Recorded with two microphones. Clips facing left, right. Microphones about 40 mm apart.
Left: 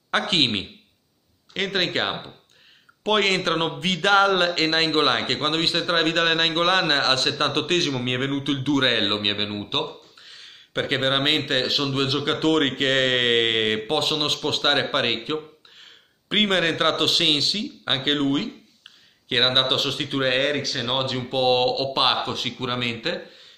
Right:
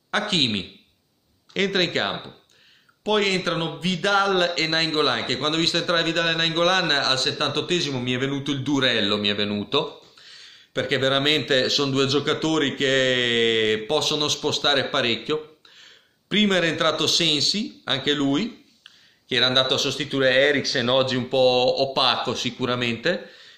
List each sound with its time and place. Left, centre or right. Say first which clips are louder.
0.1 s speech: left 1 dB; left
1.5 s speech: right 2 dB; centre
1.9 s speech: even; centre
3.0 s speech: left 1 dB; left
5.5 s speech: right 2 dB; centre
6.0 s speech: left 2 dB; left
7.9 s speech: even; left
9.5 s speech: right 3 dB; centre
10.2 s speech: left 2 dB; left
12.4 s speech: left 2 dB; left
15.8 s a man's voice: left 1 dB; left
20.2 s speech: right 4 dB; centre
20.7 s speech: right 5 dB; centre
21.0 s speech: right 2 dB; centre